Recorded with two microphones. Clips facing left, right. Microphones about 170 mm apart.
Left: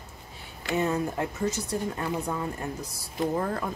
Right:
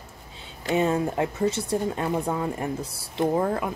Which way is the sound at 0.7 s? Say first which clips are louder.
Right 4 dB; 20° right (ahead or behind).